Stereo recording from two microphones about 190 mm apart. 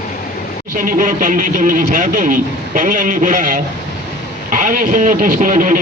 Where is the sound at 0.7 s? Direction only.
45° right (ahead or behind).